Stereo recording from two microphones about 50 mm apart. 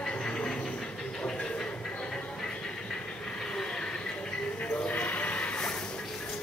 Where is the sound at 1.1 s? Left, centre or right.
Centre.